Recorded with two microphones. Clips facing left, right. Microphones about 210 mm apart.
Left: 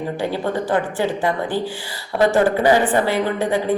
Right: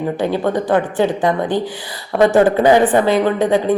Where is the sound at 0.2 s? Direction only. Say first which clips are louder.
Right 4 dB; 20° right (ahead or behind).